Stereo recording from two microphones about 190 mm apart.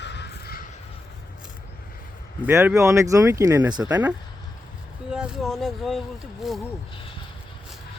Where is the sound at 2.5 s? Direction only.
15° right (ahead or behind).